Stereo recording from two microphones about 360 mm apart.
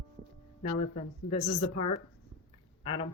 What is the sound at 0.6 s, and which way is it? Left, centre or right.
Speech, centre.